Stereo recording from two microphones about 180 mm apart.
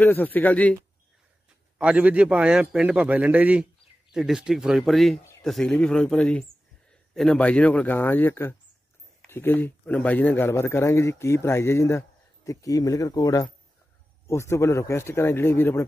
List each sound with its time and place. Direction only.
0.0 s speech: 10° left (ahead or behind)
1.8 s a man's voice: 10° right (ahead or behind); by 15.8 s 15° left (ahead or behind)